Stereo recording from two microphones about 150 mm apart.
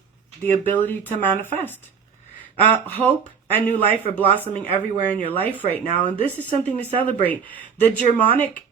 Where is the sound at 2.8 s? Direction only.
10° left (ahead or behind).